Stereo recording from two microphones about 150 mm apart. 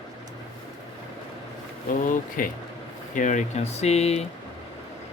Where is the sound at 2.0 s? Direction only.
65° left (ahead or behind); by 4.2 s 45° left (ahead or behind).